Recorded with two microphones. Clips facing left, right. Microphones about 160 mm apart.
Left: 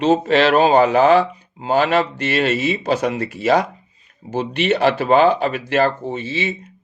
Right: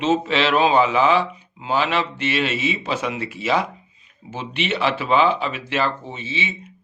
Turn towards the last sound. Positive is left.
turn(degrees=45)  # may be behind; listen again after turning